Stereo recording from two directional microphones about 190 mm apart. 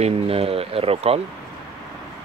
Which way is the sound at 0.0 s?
30° right (ahead or behind).